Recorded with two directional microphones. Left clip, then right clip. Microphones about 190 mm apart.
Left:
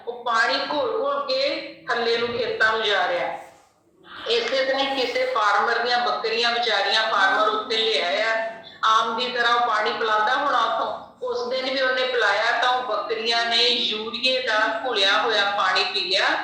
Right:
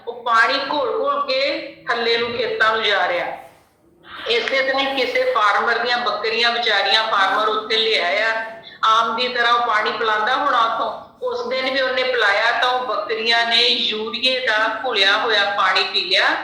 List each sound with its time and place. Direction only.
0.3 s a woman's voice: 20° right (ahead or behind)
4.3 s a woman's voice: 20° right (ahead or behind)